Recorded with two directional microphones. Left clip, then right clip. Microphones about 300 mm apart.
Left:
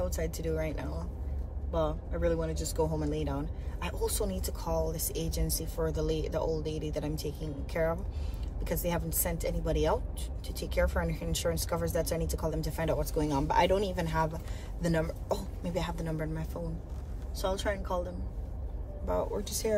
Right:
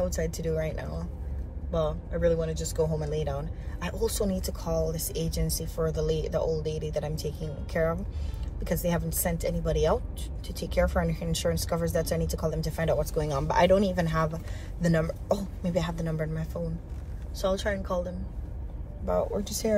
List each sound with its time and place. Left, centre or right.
0.0 s a woman's voice: centre